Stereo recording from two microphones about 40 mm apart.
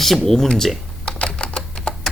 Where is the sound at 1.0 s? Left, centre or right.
Left.